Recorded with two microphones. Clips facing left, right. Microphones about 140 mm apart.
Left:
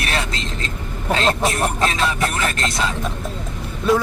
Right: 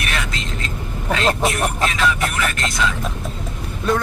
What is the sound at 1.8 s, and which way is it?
Speech, 30° left (ahead or behind).